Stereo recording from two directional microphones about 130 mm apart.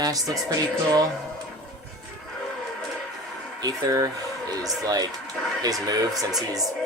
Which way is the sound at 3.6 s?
30° right (ahead or behind).